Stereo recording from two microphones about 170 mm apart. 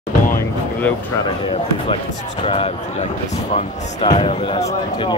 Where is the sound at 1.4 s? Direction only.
30° left (ahead or behind).